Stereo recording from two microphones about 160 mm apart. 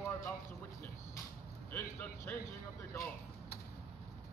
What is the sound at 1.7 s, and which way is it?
Speech, 15° left (ahead or behind).